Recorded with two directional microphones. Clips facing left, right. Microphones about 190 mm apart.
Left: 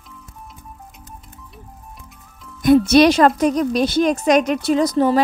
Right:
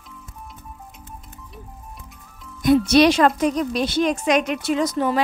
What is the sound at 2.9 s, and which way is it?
A woman's voice, 45° left (ahead or behind).